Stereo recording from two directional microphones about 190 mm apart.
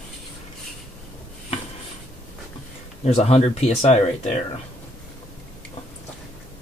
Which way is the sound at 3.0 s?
35° left (ahead or behind).